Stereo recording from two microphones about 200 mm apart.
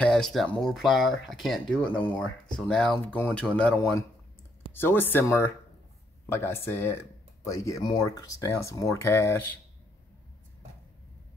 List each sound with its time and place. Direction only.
0.0 s speech: 5° left (ahead or behind)